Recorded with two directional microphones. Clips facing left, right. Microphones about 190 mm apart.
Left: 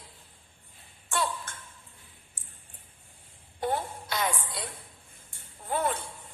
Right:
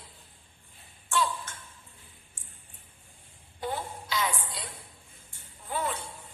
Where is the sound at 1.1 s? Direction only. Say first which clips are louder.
Right 2 dB; 55° left (ahead or behind).